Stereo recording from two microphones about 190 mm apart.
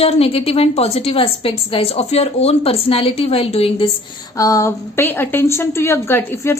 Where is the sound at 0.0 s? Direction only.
30° left (ahead or behind).